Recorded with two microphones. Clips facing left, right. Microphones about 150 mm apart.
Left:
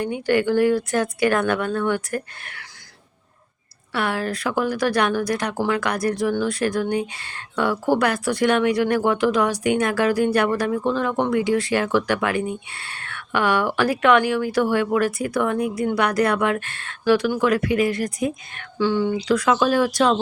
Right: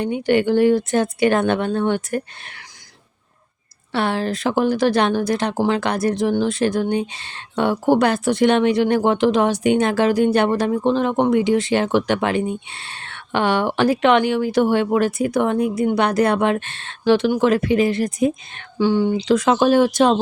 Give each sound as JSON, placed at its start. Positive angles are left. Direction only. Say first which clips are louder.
{"t": 0.0, "sound": "speech", "louder": "right 2 dB", "side_deg": -20}
{"t": 3.9, "sound": "speech", "louder": "right 3 dB", "side_deg": -25}